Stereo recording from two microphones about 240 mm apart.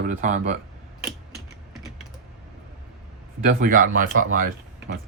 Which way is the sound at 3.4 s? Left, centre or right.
Right.